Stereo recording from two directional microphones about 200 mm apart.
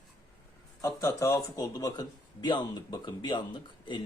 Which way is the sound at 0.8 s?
15° left (ahead or behind).